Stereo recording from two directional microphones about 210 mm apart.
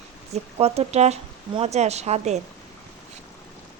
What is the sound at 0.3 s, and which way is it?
Speech, 30° right (ahead or behind).